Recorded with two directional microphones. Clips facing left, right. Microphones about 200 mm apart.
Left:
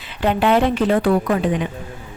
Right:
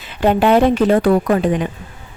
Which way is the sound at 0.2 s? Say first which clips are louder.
Right 4 dB; 45° right (ahead or behind).